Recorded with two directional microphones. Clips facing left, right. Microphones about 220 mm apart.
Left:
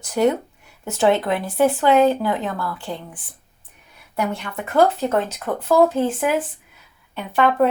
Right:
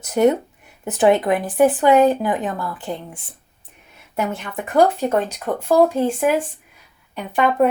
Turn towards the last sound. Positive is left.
turn(degrees=-15)  # may be behind; listen again after turning